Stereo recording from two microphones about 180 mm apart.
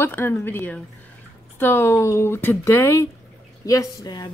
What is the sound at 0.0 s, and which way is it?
A woman's voice, 10° left (ahead or behind).